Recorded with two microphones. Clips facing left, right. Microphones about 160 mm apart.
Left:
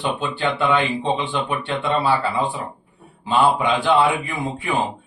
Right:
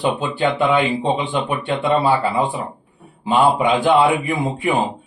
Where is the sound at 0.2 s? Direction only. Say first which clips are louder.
Right 4 dB; 10° right (ahead or behind).